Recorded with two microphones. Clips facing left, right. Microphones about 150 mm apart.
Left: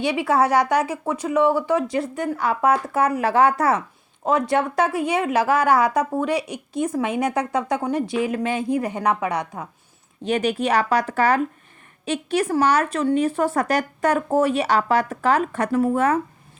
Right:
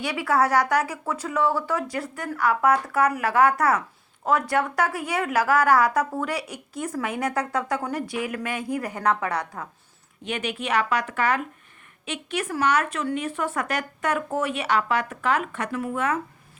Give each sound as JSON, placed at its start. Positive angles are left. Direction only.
{"t": 0.0, "sound": "speech", "side_deg": 20}
{"t": 10.2, "sound": "speech", "side_deg": 40}